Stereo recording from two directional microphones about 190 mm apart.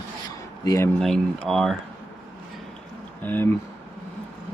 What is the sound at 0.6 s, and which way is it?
Speech, 20° left (ahead or behind).